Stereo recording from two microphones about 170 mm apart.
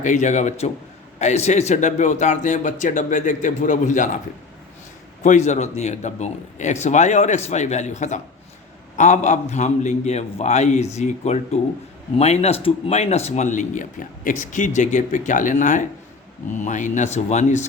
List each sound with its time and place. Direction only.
0.0 s speech: 45° left (ahead or behind)
5.2 s a man's voice: 45° left (ahead or behind)